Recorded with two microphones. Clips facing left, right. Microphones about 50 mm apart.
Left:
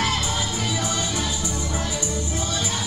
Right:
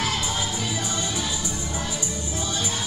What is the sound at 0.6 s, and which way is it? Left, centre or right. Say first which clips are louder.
Music: left 2 dB; left.